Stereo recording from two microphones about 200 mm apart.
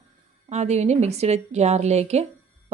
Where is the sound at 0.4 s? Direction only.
35° right (ahead or behind).